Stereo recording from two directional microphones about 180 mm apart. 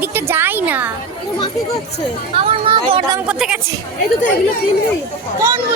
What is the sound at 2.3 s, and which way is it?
Speech, 30° right (ahead or behind).